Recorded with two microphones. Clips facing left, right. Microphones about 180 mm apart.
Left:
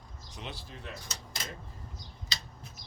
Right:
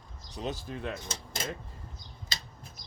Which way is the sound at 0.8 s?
50° right (ahead or behind).